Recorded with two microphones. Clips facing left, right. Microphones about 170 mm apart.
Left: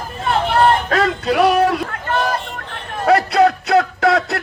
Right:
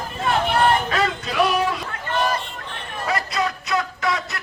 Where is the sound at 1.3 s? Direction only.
60° left (ahead or behind).